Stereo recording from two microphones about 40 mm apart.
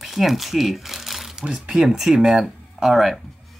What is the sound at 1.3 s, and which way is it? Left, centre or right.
Speech, centre.